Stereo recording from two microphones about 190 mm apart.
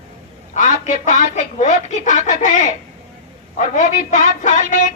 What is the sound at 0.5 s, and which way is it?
A woman's voice, 40° left (ahead or behind).